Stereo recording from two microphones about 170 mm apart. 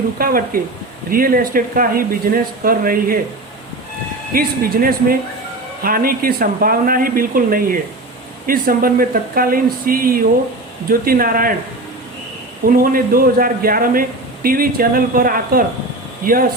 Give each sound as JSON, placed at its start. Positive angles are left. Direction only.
{"t": 0.2, "sound": "speech", "side_deg": -60}
{"t": 4.4, "sound": "speech", "side_deg": -60}
{"t": 12.6, "sound": "speech", "side_deg": -55}